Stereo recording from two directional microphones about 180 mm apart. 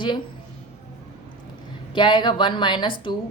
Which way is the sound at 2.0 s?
25° left (ahead or behind).